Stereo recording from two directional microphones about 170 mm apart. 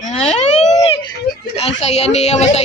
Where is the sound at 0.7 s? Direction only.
40° left (ahead or behind).